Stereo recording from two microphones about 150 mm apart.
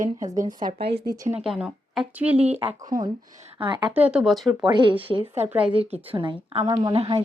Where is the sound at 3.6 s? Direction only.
30° right (ahead or behind).